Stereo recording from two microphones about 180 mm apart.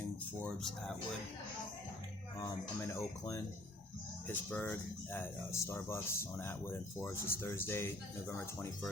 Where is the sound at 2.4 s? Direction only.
15° left (ahead or behind).